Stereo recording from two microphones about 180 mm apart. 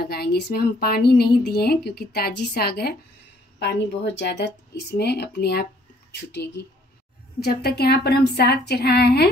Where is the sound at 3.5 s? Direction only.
70° left (ahead or behind).